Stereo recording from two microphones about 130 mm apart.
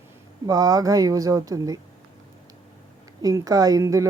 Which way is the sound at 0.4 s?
25° right (ahead or behind).